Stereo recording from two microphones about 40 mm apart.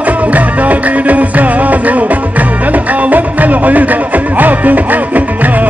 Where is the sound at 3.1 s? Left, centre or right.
Right.